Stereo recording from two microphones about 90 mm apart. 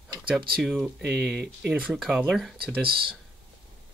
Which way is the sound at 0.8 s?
Centre (ahead or behind).